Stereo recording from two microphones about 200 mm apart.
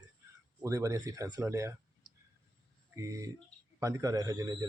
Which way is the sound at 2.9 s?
15° right (ahead or behind).